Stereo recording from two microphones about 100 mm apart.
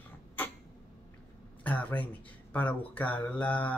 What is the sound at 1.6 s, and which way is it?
Speech, 15° left (ahead or behind).